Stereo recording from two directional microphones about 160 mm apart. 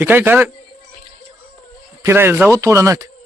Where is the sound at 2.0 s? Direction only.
15° right (ahead or behind).